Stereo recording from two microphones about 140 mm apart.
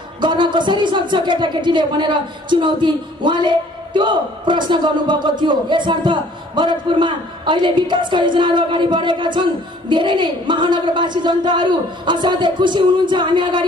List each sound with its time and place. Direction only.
0.2 s a woman's voice: 35° right (ahead or behind)